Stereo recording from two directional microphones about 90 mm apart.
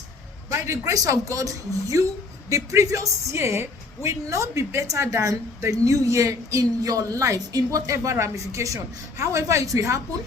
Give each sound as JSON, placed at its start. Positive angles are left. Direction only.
{"t": 0.5, "sound": "a woman's voice", "side_deg": -35}